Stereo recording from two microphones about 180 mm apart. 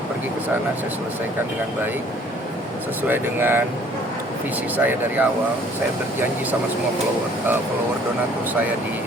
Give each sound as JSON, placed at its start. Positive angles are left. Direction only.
{"t": 3.1, "sound": "speech", "side_deg": -10}
{"t": 4.8, "sound": "speech", "side_deg": -10}